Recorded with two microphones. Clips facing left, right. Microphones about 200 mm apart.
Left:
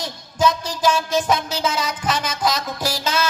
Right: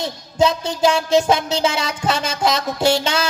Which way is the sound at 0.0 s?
25° right (ahead or behind).